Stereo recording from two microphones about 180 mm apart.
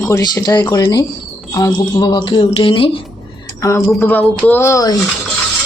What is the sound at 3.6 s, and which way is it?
Speech, 15° left (ahead or behind).